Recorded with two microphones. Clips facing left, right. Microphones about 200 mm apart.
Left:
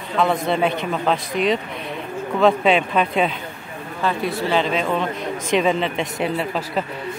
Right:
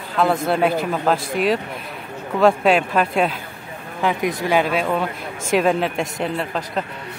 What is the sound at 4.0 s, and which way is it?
Speech, 15° right (ahead or behind).